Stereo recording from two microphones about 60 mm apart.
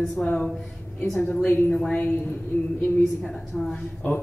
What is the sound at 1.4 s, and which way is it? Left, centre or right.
A woman's voice, left.